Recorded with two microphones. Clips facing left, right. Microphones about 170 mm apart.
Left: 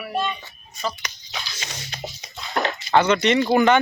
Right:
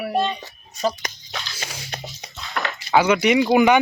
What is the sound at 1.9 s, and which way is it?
Music, 60° right (ahead or behind).